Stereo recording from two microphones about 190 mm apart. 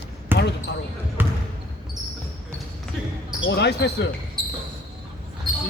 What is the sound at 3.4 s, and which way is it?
Basketball bounce, 65° left (ahead or behind).